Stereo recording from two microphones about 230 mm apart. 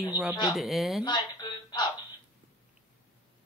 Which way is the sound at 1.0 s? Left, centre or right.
Centre.